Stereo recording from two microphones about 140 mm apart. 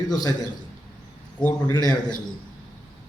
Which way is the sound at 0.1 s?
30° left (ahead or behind).